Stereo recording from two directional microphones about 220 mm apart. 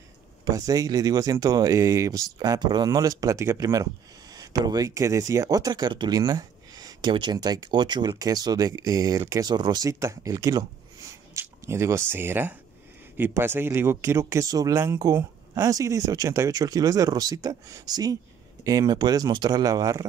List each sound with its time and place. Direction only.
0.5 s speech: 15° right (ahead or behind)